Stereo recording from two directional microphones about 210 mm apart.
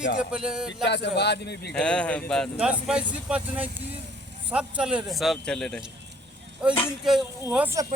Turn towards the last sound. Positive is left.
turn(degrees=-10)  # may be behind; listen again after turning